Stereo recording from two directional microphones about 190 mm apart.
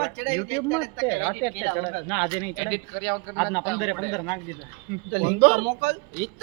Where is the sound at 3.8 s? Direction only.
25° left (ahead or behind).